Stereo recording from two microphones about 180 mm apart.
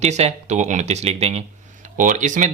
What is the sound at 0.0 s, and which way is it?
Speech, 40° right (ahead or behind).